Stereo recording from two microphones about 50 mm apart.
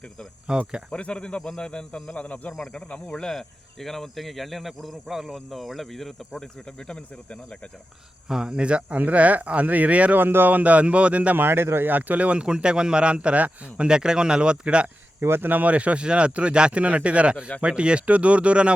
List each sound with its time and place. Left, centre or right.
0.5 s speech: centre
0.9 s speech: left; by 6.1 s centre
6.4 s speech: centre
8.3 s a man's voice: centre
10.2 s a man's voice: right
11.3 s speech: right
11.9 s a man's voice: right
13.8 s speech: centre
15.2 s speech: right
15.4 s a man's voice: right